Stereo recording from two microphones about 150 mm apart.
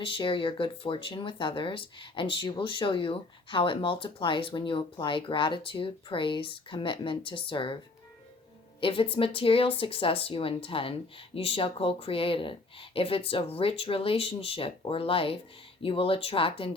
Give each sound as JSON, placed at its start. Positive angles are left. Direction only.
{"t": 0.0, "sound": "speech", "side_deg": 35}
{"t": 8.8, "sound": "speech", "side_deg": 35}